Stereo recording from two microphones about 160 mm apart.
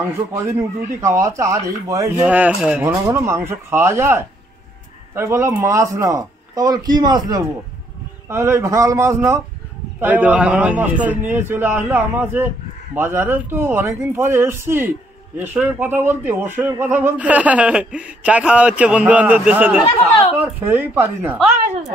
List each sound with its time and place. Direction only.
0.3 s speech: 20° right (ahead or behind)
2.1 s speech: 10° right (ahead or behind)